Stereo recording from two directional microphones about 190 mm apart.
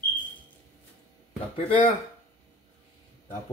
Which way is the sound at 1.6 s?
40° left (ahead or behind).